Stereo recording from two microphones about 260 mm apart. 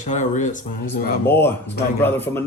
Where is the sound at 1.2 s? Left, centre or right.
Centre.